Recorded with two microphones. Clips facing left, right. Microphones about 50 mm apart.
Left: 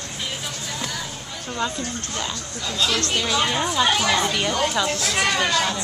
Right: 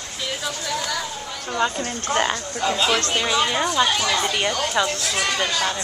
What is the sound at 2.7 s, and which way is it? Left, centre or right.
Speech, right.